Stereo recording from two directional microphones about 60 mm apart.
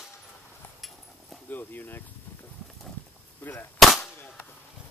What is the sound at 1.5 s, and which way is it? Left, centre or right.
Speech, left.